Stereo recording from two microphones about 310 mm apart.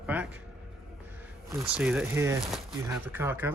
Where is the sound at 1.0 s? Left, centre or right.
Centre.